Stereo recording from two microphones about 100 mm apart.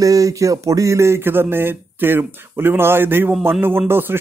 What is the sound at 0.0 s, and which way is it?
Speech, 35° right (ahead or behind).